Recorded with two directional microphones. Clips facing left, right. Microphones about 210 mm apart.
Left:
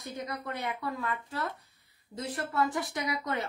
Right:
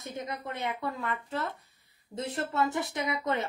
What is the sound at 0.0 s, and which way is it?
Speech, 20° right (ahead or behind).